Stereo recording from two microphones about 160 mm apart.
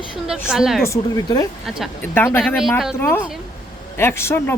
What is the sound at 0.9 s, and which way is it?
Speech, 20° left (ahead or behind).